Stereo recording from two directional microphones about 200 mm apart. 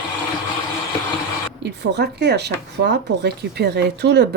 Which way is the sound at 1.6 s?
55° right (ahead or behind).